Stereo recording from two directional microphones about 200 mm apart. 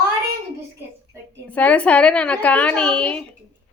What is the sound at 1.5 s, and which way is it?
A woman's voice, 5° left (ahead or behind).